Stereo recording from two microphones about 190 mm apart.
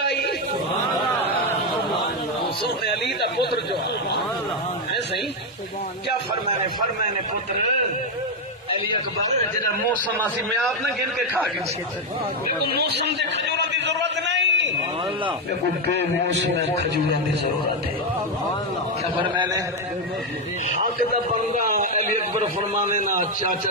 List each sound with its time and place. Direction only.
0.0 s chant: 60° left (ahead or behind)
2.8 s chatter: 60° left (ahead or behind)
12.4 s speech: 55° right (ahead or behind)
13.6 s a sound: 65° right (ahead or behind)
19.1 s a man's voice: 25° right (ahead or behind)
21.5 s a sound: 45° right (ahead or behind)